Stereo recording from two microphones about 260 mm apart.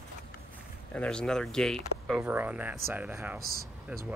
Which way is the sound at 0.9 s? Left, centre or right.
Centre.